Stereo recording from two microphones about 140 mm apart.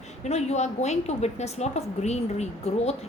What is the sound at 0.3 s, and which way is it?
A woman's voice, 50° left (ahead or behind).